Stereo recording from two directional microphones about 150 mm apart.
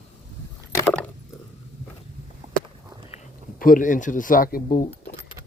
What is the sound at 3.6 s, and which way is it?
Speech, 65° left (ahead or behind).